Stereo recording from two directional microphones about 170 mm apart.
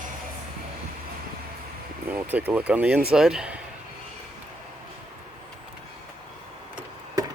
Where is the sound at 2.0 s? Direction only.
10° right (ahead or behind).